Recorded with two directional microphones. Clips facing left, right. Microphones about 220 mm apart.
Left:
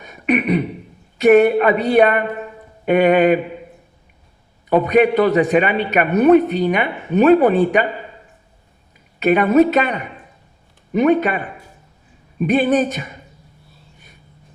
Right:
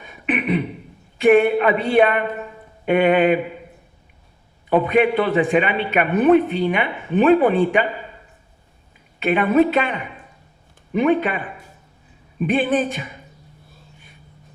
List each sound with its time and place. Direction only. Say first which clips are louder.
0.0 s a sound: left 5 dB; 45° left (ahead or behind)
1.2 s a man's voice: left 3 dB; 40° left (ahead or behind)
4.7 s a man's voice: left 3 dB; 40° left (ahead or behind)
9.2 s a woman's voice: left 3 dB; 40° left (ahead or behind)
12.4 s a man's voice: left 3 dB; 40° left (ahead or behind)